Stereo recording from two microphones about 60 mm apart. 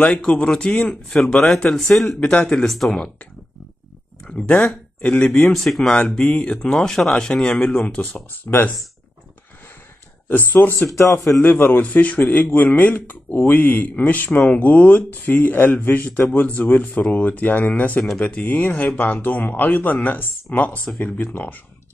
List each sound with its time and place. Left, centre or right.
0.0 s speech: left
1.2 s speech: centre
2.7 s speech: centre
4.3 s speech: centre
5.5 s speech: centre
6.0 s speech: centre
8.5 s speech: left
10.2 s speech: left
10.9 s a man's voice: left
11.1 s speech: centre
11.4 s speech: left